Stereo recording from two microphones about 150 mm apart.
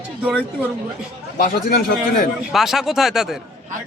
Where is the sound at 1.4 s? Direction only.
70° left (ahead or behind).